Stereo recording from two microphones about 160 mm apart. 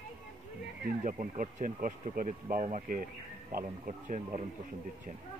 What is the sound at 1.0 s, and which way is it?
Speech, 55° right (ahead or behind).